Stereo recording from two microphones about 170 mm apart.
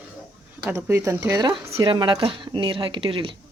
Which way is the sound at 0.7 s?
10° right (ahead or behind).